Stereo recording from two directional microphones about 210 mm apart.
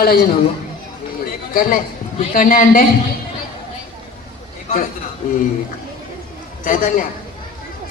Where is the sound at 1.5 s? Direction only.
40° left (ahead or behind).